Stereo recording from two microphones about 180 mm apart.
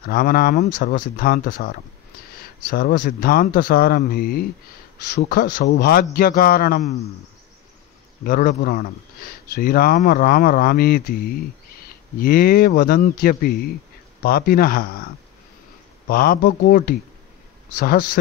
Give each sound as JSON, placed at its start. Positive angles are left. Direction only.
{"t": 0.1, "sound": "speech", "side_deg": 55}
{"t": 8.2, "sound": "speech", "side_deg": 50}
{"t": 16.1, "sound": "speech", "side_deg": 55}